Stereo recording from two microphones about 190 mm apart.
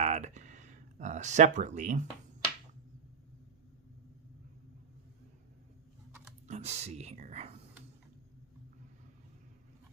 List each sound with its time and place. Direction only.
0.0 s speech: 35° right (ahead or behind)
6.5 s speech: 35° right (ahead or behind)